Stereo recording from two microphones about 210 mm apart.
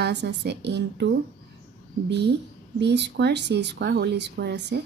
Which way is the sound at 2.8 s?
55° right (ahead or behind).